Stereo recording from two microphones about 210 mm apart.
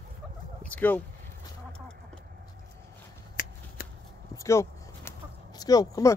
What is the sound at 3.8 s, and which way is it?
Shuffling cards, 45° left (ahead or behind).